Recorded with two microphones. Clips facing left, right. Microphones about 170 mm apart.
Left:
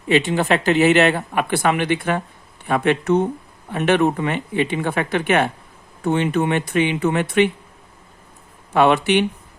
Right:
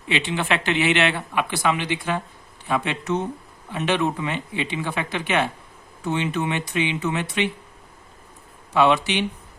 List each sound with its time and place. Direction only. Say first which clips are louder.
0.1 s speech: left 7 dB; 45° left (ahead or behind)
8.7 s speech: left 4 dB; 50° left (ahead or behind)